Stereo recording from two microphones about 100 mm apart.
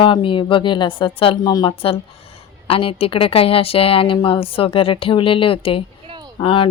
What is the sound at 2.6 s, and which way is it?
A woman's voice, 65° left (ahead or behind).